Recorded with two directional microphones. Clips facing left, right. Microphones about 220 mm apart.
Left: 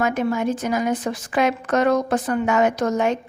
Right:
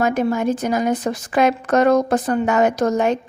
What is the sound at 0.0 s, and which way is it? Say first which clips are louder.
A woman's voice: right 3 dB; 40° right (ahead or behind).